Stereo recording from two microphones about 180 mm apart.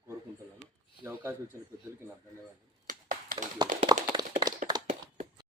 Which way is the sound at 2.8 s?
50° right (ahead or behind).